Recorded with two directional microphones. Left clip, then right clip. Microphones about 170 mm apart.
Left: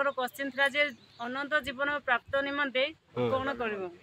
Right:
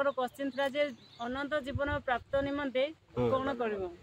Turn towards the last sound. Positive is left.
turn(degrees=10)  # may be behind; listen again after turning